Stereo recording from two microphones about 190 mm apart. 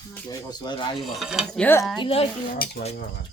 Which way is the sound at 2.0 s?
30° left (ahead or behind).